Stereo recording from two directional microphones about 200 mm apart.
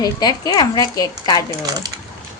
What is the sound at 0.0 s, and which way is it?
Speech, 20° left (ahead or behind).